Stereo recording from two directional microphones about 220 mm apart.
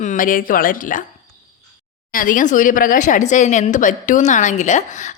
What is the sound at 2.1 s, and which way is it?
Speech, 40° left (ahead or behind).